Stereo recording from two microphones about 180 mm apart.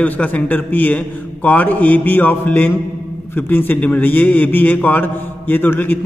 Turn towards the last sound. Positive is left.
turn(degrees=10)  # may be behind; listen again after turning